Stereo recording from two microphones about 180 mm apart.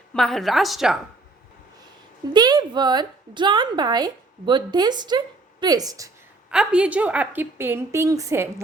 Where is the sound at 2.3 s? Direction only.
25° right (ahead or behind).